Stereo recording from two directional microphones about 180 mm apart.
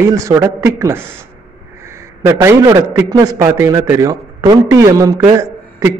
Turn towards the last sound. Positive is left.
turn(degrees=-20)  # may be behind; listen again after turning